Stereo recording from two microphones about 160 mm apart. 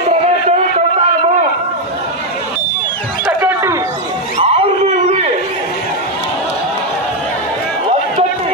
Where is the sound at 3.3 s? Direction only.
15° right (ahead or behind).